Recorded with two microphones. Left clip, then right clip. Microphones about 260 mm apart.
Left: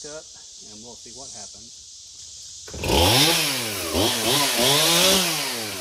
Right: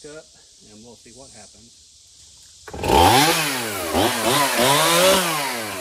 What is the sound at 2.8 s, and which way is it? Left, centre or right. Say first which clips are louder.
Chainsaw: right 4 dB; centre.